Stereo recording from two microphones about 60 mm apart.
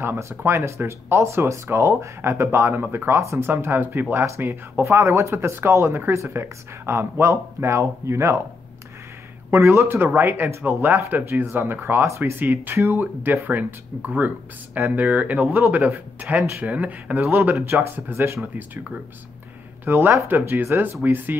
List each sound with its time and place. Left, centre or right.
0.0 s speech: right
4.2 s speech: right
9.6 s speech: right
9.8 s speech: right
14.8 s speech: right
15.1 s speech: right
19.8 s speech: right